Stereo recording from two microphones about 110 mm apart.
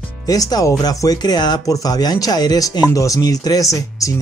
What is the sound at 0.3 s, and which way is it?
Speech, 35° left (ahead or behind).